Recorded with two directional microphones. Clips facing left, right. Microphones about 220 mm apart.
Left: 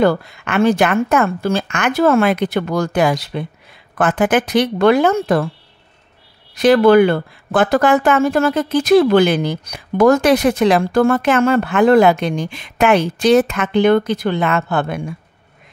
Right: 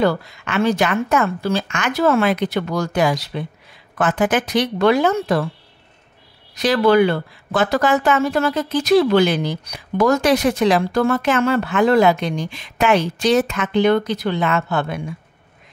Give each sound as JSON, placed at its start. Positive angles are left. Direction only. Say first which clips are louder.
{"t": 0.0, "sound": "speech", "louder": "left 4 dB", "side_deg": 55}
{"t": 6.5, "sound": "speech", "louder": "left 5 dB", "side_deg": 55}